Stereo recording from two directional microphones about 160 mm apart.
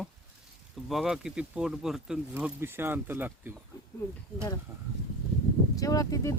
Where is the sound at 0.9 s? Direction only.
Centre (ahead or behind).